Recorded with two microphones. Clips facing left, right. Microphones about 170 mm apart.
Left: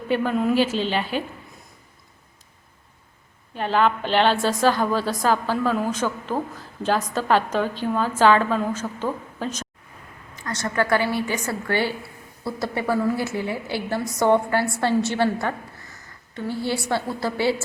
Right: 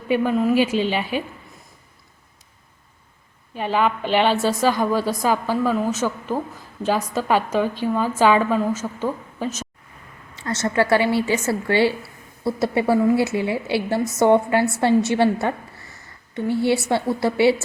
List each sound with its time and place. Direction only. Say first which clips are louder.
0.1 s a woman's voice: right 3 dB; 5° right (ahead or behind)
3.5 s a woman's voice: even; 10° right (ahead or behind)
10.4 s a woman's voice: right 4 dB; 25° right (ahead or behind)